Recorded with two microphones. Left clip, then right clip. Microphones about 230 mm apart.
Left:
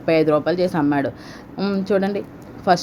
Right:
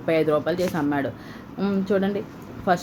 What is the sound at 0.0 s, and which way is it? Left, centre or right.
Speech, centre.